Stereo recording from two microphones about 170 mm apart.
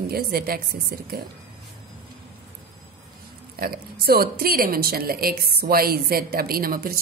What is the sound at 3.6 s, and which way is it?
Speech, 65° right (ahead or behind).